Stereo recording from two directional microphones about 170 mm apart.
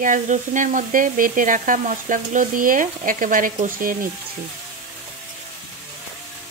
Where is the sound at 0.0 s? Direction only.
50° right (ahead or behind).